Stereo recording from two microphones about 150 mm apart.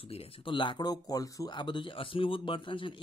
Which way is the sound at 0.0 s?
40° left (ahead or behind).